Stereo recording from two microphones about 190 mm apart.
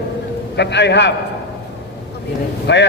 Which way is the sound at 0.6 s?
65° left (ahead or behind).